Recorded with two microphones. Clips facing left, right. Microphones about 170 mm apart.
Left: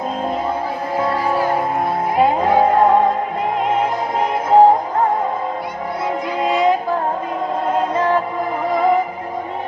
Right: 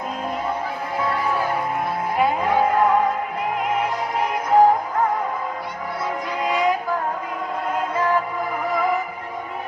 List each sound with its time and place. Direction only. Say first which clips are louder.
0.9 s music: left 4 dB; 35° left (ahead or behind)
6.4 s a sound: left 5 dB; 25° left (ahead or behind)
7.7 s music: left 4 dB; 30° left (ahead or behind)